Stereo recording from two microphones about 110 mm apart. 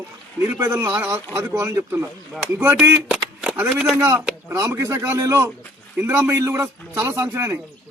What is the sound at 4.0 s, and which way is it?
Speech, 20° right (ahead or behind).